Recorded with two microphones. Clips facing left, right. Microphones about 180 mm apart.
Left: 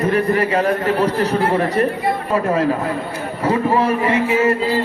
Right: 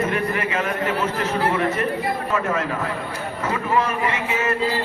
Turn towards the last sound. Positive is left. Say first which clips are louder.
# left 7 dB
turn(degrees=30)  # may be behind; listen again after turning